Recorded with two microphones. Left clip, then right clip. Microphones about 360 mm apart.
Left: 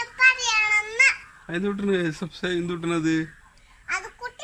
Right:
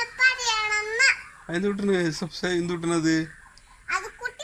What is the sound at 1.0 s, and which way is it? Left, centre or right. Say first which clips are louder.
Speech: right 1 dB; centre.